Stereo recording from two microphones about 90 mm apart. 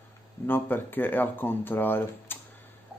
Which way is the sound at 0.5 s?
20° left (ahead or behind).